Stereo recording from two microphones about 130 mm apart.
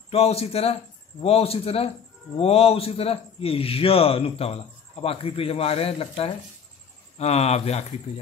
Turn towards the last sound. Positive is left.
turn(degrees=50)  # may be behind; listen again after turning